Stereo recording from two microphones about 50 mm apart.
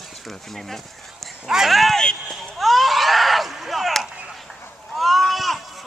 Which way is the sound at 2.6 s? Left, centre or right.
Centre.